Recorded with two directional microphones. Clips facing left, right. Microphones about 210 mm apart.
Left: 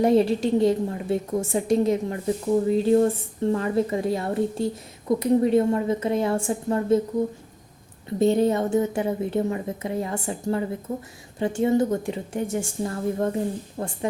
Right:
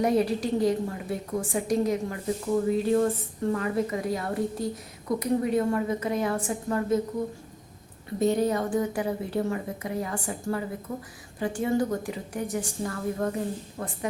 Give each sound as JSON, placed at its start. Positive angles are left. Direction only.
{"t": 0.0, "sound": "a woman's voice", "side_deg": 25}
{"t": 8.2, "sound": "a woman's voice", "side_deg": 25}